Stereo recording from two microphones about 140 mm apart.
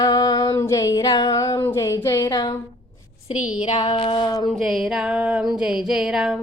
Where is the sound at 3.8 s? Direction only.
35° left (ahead or behind).